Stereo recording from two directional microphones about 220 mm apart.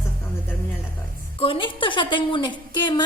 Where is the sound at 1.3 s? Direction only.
25° left (ahead or behind).